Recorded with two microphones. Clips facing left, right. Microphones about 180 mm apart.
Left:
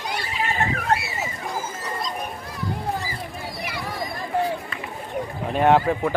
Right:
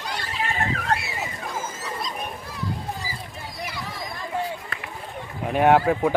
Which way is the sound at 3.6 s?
65° left (ahead or behind).